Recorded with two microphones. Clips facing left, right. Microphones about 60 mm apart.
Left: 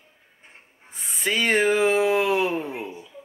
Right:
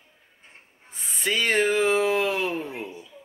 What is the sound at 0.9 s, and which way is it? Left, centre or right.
Speech, centre.